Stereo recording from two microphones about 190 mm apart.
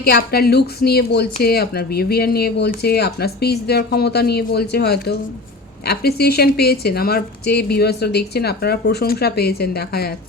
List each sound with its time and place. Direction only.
0.0 s speech: 55° left (ahead or behind)